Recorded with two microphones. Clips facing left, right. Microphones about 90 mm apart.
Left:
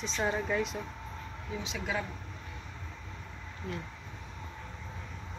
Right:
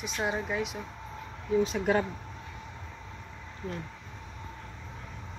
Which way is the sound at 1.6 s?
50° right (ahead or behind).